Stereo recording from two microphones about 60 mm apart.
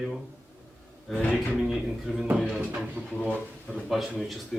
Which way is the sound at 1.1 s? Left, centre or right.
Left.